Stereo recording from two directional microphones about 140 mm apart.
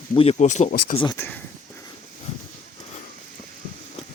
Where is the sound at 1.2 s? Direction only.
15° left (ahead or behind).